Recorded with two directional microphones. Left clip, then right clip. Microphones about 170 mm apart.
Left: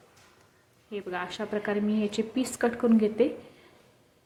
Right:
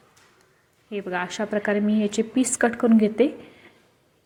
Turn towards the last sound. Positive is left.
turn(degrees=-25)  # may be behind; listen again after turning